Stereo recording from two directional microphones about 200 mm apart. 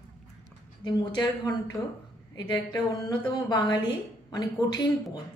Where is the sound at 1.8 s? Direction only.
15° left (ahead or behind).